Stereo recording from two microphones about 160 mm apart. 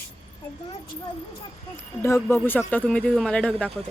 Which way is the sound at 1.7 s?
15° left (ahead or behind).